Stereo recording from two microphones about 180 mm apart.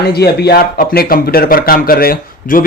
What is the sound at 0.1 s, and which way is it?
Speech, 60° left (ahead or behind).